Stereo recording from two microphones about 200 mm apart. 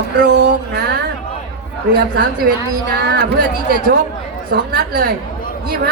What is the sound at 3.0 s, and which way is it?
Speech, 55° right (ahead or behind).